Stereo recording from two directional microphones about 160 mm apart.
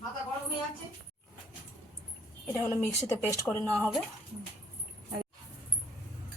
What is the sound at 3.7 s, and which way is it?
Speech, 5° left (ahead or behind).